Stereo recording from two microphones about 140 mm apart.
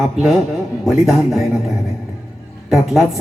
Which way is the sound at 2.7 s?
Centre (ahead or behind).